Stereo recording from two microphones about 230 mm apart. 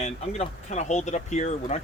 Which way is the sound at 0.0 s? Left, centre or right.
Left.